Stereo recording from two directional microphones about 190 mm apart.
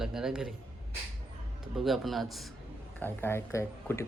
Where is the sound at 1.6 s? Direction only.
Centre (ahead or behind).